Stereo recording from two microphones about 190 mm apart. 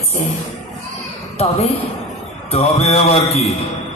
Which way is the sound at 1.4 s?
35° left (ahead or behind).